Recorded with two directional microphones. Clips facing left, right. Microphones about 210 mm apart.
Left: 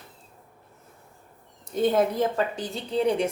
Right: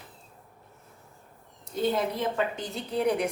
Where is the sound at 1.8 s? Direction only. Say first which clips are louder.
Left 5 dB; 40° left (ahead or behind).